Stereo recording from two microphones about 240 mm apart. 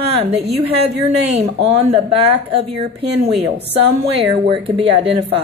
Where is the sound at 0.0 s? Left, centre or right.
Right.